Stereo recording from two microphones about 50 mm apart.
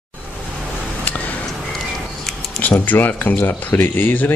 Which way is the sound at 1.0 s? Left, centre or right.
Left.